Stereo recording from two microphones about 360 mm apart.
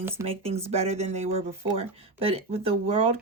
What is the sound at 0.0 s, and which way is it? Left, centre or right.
Speech, centre.